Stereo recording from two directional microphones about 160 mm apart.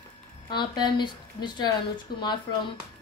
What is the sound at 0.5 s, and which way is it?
A woman's voice, 25° left (ahead or behind).